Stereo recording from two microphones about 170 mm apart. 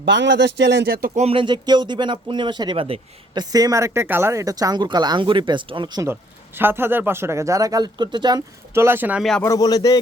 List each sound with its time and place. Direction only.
0.0 s speech: 90° right; by 1.1 s 65° right (ahead or behind)
1.1 s speech: 35° right (ahead or behind)
3.5 s speech: 20° right (ahead or behind)
6.6 s speech: 10° right (ahead or behind)
8.7 s speech: 15° right (ahead or behind)
9.4 s a man's voice: 20° left (ahead or behind)